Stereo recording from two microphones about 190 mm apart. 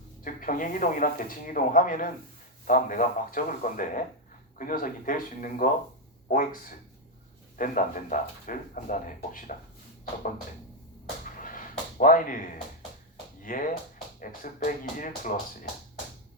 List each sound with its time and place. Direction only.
0.3 s speech: 45° left (ahead or behind)
11.3 s a sound: 45° left (ahead or behind)
11.9 s speech: 45° left (ahead or behind)